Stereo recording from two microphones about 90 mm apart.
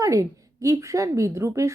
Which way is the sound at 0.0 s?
40° right (ahead or behind).